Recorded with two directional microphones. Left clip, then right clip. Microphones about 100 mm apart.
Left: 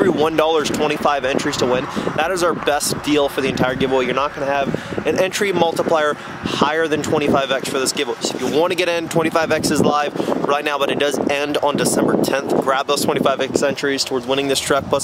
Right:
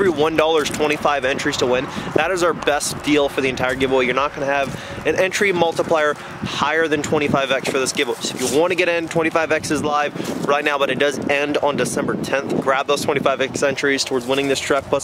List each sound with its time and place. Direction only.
0.0 s speech: 15° left (ahead or behind)